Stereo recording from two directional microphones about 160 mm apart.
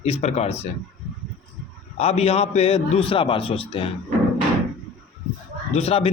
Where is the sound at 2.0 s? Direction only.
40° left (ahead or behind).